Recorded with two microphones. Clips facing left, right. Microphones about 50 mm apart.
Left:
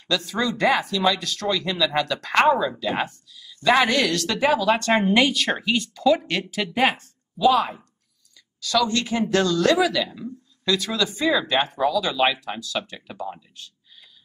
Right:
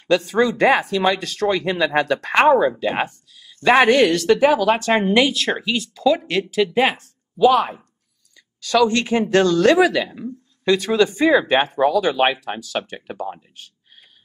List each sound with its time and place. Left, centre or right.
0.1 s speech: right
2.8 s speech: right
4.9 s speech: centre
5.4 s speech: centre
8.5 s speech: right